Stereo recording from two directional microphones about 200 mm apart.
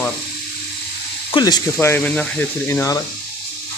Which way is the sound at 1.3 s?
20° left (ahead or behind).